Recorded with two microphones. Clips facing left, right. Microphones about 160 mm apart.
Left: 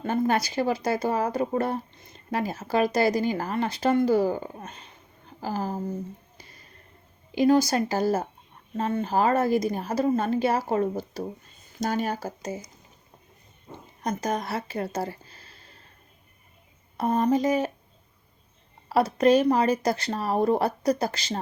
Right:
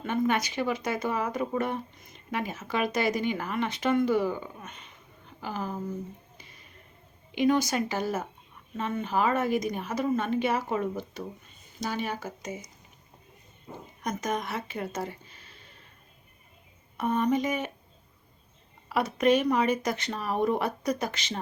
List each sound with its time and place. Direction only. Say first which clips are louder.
0.0 s a woman's voice: left 3 dB; 35° left (ahead or behind)
11.8 s a woman's voice: left 5 dB; 45° left (ahead or behind)
14.0 s speech: left 3 dB; 35° left (ahead or behind)
17.0 s a woman's voice: left 3 dB; 35° left (ahead or behind)
18.9 s a woman's voice: left 4 dB; 35° left (ahead or behind)